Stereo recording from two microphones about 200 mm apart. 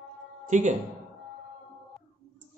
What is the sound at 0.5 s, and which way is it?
Speech, 40° right (ahead or behind).